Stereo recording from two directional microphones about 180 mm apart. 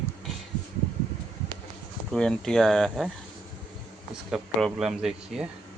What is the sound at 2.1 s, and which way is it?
Speech, 5° left (ahead or behind).